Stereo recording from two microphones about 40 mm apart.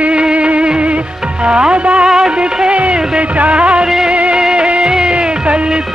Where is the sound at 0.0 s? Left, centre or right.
Right.